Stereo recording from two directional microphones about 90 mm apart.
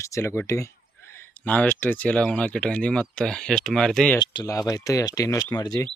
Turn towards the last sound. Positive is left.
turn(degrees=40)  # may be behind; listen again after turning